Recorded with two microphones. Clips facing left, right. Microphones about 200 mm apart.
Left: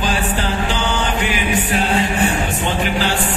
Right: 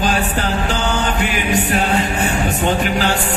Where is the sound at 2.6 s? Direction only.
45° right (ahead or behind).